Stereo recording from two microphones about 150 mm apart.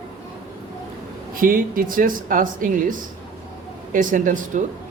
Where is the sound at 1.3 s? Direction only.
65° right (ahead or behind).